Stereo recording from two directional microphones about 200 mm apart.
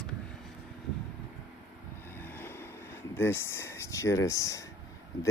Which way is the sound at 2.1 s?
10° left (ahead or behind).